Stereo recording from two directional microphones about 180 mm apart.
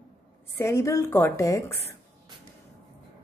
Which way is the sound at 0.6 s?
15° left (ahead or behind).